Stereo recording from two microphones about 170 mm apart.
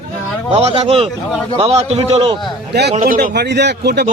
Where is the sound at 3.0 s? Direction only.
50° right (ahead or behind).